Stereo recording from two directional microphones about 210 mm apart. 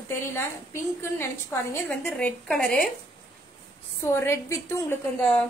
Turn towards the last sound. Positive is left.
turn(degrees=5)  # may be behind; listen again after turning